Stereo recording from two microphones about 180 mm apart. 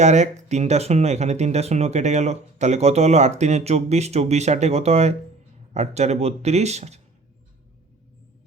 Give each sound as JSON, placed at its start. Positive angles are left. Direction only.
{"t": 0.0, "sound": "speech", "side_deg": -40}